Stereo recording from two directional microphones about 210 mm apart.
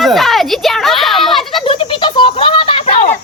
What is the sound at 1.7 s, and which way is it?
Speech, 25° left (ahead or behind).